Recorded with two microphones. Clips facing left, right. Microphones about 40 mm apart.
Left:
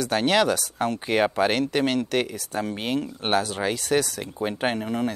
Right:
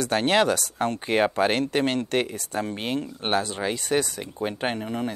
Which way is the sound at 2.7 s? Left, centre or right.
Centre.